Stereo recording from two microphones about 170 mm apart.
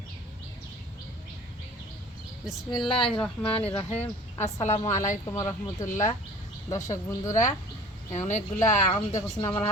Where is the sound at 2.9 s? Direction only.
30° left (ahead or behind).